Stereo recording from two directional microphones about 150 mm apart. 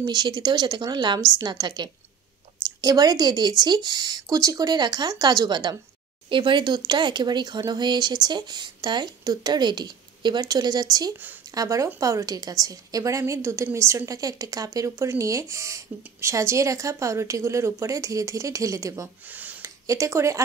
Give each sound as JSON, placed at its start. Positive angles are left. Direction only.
{"t": 0.0, "sound": "speech", "side_deg": -30}
{"t": 19.2, "sound": "speech", "side_deg": -10}